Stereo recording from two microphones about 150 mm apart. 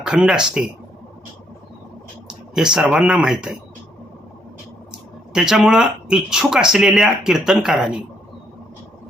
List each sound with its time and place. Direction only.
0.0 s speech: 5° right (ahead or behind)
2.2 s speech: 5° right (ahead or behind)
5.3 s speech: 5° right (ahead or behind)